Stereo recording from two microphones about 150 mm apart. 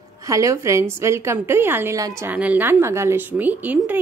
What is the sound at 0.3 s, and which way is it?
Speech, 20° right (ahead or behind).